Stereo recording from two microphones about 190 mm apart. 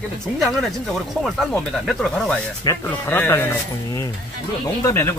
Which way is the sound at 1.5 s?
5° left (ahead or behind).